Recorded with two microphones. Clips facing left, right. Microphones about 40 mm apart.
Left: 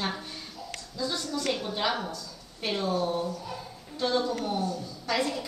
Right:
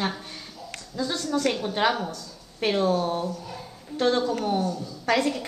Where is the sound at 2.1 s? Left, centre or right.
Right.